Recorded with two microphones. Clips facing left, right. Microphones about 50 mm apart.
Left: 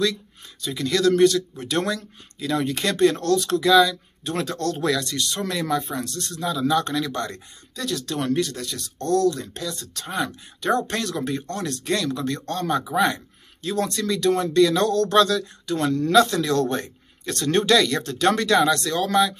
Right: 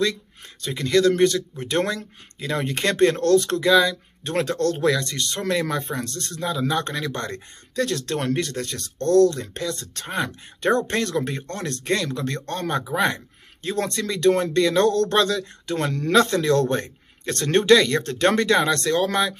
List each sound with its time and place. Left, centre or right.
0.7 s a man's voice: right
3.6 s a man's voice: right
4.7 s speech: right
5.0 s a man's voice: right
5.9 s speech: right
6.7 s a man's voice: right
10.0 s a man's voice: right